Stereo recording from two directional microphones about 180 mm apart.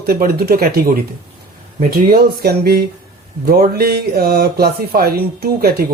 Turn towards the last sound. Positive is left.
turn(degrees=-60)  # may be behind; listen again after turning